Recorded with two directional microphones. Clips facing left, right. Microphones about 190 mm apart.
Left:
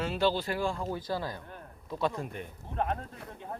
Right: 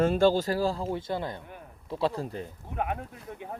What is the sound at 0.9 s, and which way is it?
Speech, 25° right (ahead or behind).